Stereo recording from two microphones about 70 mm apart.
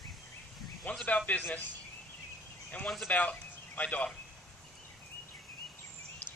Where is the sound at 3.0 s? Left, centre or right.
Left.